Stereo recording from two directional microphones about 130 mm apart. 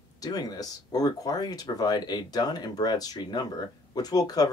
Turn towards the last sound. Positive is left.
turn(degrees=30)  # may be behind; listen again after turning